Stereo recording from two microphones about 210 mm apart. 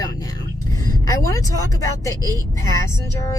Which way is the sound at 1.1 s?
15° left (ahead or behind).